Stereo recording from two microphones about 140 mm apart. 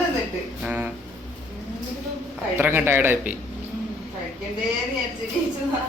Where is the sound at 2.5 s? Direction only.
15° right (ahead or behind).